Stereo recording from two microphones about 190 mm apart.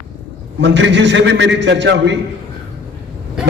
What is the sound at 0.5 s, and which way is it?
A man's voice, 70° right (ahead or behind).